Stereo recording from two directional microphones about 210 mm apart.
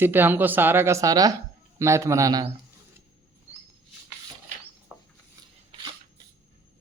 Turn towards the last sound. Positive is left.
turn(degrees=0)  # may be behind; listen again after turning